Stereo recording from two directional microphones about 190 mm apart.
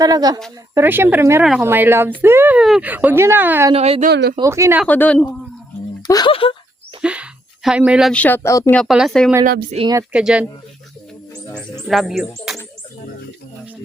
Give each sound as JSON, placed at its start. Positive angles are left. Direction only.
{"t": 0.0, "sound": "a woman's voice", "side_deg": -20}
{"t": 3.7, "sound": "speech", "side_deg": -30}
{"t": 4.1, "sound": "speech", "side_deg": -60}
{"t": 4.4, "sound": "speech", "side_deg": -15}
{"t": 4.9, "sound": "speech", "side_deg": 10}
{"t": 6.1, "sound": "speech", "side_deg": 20}
{"t": 7.0, "sound": "a sound", "side_deg": -5}
{"t": 8.1, "sound": "speech", "side_deg": 10}
{"t": 9.7, "sound": "a woman's voice", "side_deg": -25}
{"t": 10.0, "sound": "speech", "side_deg": -5}
{"t": 11.5, "sound": "speech", "side_deg": 0}